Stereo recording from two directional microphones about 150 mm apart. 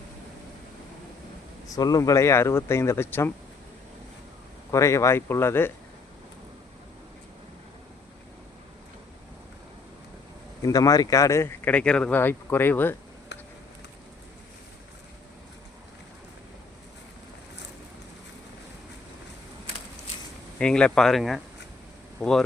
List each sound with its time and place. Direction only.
1.6 s speech: 25° left (ahead or behind)
4.7 s speech: 20° left (ahead or behind)
10.6 s speech: 25° left (ahead or behind)
20.6 s speech: 5° left (ahead or behind)